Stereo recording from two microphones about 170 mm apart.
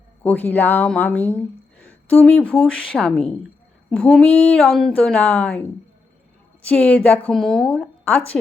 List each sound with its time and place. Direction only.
0.2 s speech: 10° left (ahead or behind)
6.7 s speech: 10° left (ahead or behind)